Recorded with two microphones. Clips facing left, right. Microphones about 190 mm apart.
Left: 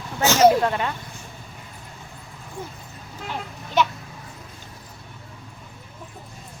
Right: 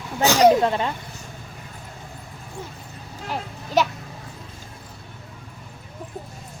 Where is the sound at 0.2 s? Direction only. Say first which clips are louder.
Right 1 dB; 15° right (ahead or behind).